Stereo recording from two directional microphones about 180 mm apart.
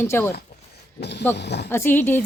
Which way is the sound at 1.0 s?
65° left (ahead or behind).